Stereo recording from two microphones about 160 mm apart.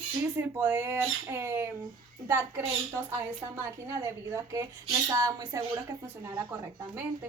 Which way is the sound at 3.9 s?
20° right (ahead or behind).